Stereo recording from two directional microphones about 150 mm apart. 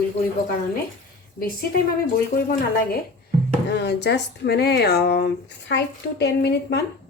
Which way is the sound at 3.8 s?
90° left.